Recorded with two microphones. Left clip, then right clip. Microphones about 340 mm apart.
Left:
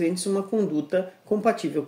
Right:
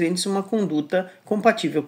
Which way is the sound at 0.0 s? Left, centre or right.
Right.